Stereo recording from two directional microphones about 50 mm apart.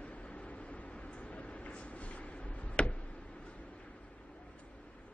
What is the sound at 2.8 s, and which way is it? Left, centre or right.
Tick-tock, left.